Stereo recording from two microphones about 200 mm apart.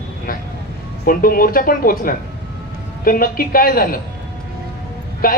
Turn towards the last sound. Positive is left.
turn(degrees=45)  # may be behind; listen again after turning